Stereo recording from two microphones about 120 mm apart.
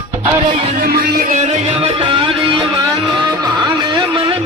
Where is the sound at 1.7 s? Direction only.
50° right (ahead or behind).